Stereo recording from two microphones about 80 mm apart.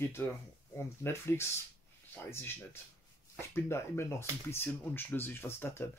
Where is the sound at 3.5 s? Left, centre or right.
Left.